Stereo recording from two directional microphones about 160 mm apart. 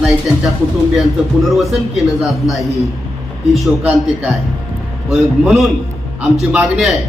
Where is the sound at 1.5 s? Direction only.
Centre (ahead or behind).